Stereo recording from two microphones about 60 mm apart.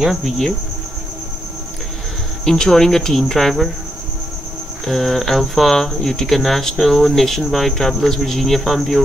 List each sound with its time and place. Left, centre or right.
0.0 s speech: centre
2.4 s speech: centre
4.8 s speech: centre